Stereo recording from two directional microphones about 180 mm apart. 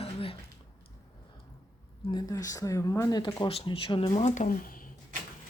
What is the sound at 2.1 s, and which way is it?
Speech, 20° left (ahead or behind).